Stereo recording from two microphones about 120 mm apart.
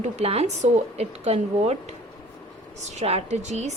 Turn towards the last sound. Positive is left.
turn(degrees=-70)  # may be behind; listen again after turning